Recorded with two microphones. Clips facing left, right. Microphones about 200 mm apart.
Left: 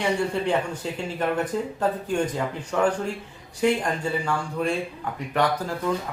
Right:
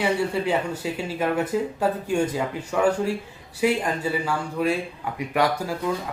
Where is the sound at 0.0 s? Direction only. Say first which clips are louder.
Right 1 dB; 5° right (ahead or behind).